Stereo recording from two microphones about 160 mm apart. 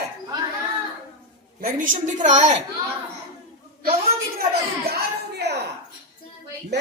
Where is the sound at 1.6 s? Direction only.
60° right (ahead or behind).